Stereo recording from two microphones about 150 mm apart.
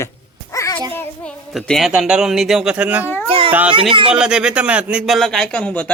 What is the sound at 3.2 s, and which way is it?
Cat, 35° right (ahead or behind).